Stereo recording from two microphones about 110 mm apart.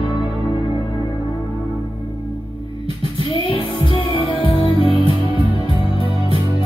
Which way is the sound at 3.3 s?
50° left (ahead or behind).